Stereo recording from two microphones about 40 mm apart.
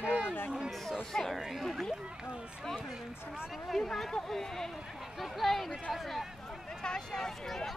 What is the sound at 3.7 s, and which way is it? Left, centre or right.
Speech, centre.